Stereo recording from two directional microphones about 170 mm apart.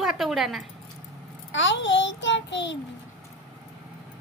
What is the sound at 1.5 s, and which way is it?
A child's voice, 90° left.